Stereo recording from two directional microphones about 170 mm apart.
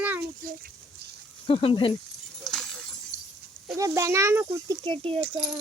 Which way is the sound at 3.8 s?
15° right (ahead or behind).